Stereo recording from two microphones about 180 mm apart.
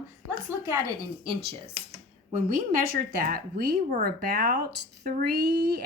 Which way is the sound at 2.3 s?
50° right (ahead or behind).